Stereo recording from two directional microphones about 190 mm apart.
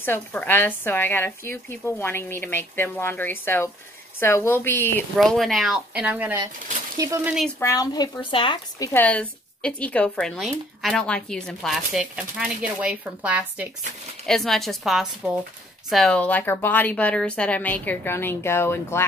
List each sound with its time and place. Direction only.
0.0 s a woman's voice: 10° left (ahead or behind); by 7.3 s 15° right (ahead or behind)
7.6 s a woman's voice: 20° left (ahead or behind)